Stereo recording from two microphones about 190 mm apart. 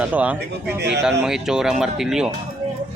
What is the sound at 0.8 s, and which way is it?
Speech, 65° right (ahead or behind).